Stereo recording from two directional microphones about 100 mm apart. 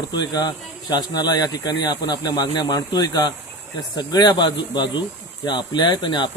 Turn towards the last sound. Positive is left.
turn(degrees=45)  # may be behind; listen again after turning